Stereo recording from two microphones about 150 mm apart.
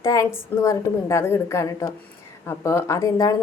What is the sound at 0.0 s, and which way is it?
A woman's voice, 20° left (ahead or behind).